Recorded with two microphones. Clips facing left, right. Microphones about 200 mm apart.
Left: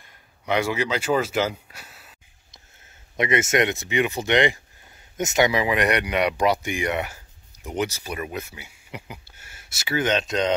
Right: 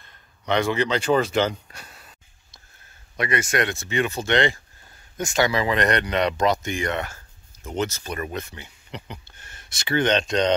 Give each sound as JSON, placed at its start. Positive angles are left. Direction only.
{"t": 0.0, "sound": "speech", "side_deg": 10}
{"t": 3.2, "sound": "speech", "side_deg": 20}